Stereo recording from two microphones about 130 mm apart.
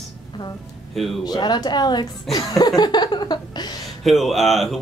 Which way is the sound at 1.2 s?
35° left (ahead or behind).